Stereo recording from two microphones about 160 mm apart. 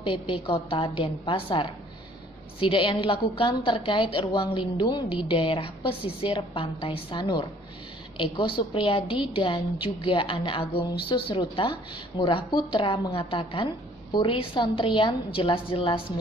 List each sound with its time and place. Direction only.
0.0 s a woman's voice: 30° left (ahead or behind)